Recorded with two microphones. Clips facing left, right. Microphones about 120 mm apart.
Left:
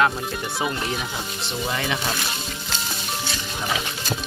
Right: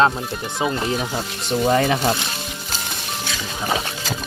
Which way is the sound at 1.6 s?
40° right (ahead or behind).